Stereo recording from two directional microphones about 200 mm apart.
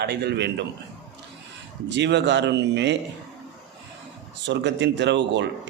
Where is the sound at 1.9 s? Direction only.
60° right (ahead or behind).